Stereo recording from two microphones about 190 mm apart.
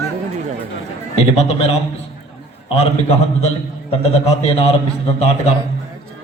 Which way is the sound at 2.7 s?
30° left (ahead or behind).